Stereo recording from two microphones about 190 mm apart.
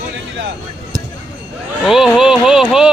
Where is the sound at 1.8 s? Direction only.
Centre (ahead or behind).